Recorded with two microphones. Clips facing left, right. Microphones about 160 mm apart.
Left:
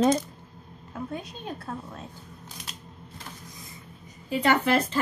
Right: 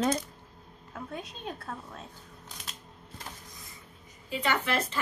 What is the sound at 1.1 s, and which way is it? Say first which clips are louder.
Speech: left 3 dB; centre (ahead or behind).